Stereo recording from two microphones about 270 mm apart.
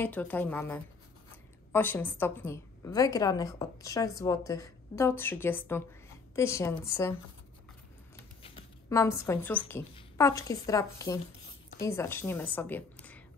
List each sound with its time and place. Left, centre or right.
0.0 s a woman's voice: centre
8.4 s a woman's voice: centre